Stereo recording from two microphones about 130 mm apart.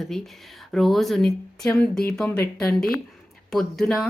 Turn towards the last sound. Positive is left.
turn(degrees=0)  # may be behind; listen again after turning